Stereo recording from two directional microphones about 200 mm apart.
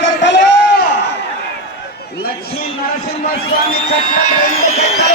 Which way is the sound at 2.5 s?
50° left (ahead or behind).